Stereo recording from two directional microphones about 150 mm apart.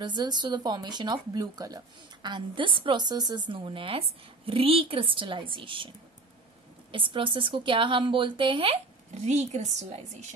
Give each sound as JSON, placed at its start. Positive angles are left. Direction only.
{"t": 0.0, "sound": "a woman's voice", "side_deg": -30}
{"t": 6.9, "sound": "a woman's voice", "side_deg": -35}
{"t": 9.1, "sound": "a woman's voice", "side_deg": -50}